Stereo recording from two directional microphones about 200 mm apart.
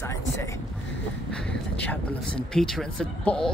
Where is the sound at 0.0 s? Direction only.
15° left (ahead or behind).